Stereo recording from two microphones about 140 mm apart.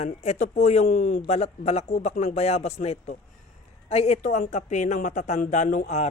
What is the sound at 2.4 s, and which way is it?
A man's voice, 50° left (ahead or behind).